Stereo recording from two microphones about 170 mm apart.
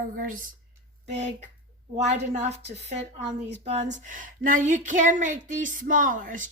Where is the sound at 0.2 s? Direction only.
55° right (ahead or behind).